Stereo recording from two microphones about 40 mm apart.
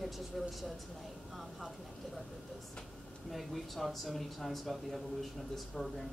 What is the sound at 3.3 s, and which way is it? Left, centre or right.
Speech, centre.